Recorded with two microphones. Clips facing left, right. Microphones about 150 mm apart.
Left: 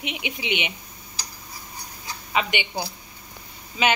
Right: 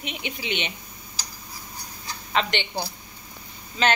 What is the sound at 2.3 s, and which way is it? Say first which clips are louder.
Speech: even; 10° left (ahead or behind).